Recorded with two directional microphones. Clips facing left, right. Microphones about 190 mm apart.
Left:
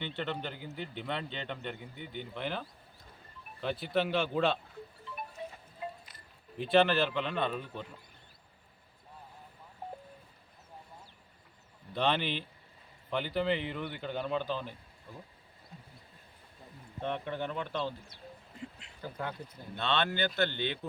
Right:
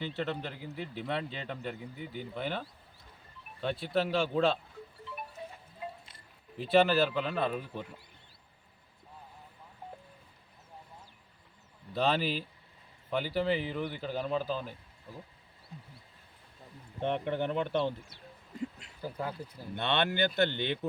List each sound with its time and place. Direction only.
0.1 s a man's voice: 5° right (ahead or behind)
6.6 s a man's voice: centre (ahead or behind)
11.9 s a man's voice: 5° right (ahead or behind)
17.0 s speech: 20° right (ahead or behind)
19.0 s speech: 10° right (ahead or behind)